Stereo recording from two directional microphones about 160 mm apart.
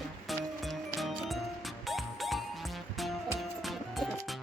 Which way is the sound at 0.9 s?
Centre (ahead or behind).